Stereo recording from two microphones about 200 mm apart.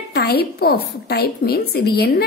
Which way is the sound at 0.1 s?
55° left (ahead or behind).